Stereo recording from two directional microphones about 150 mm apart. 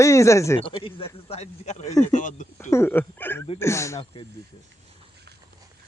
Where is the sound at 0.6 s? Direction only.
35° left (ahead or behind); by 2.5 s 55° left (ahead or behind).